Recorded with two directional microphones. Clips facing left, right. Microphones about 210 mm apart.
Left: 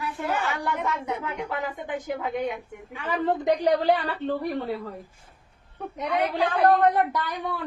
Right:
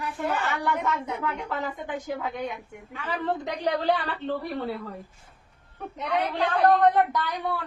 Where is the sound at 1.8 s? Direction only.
20° left (ahead or behind).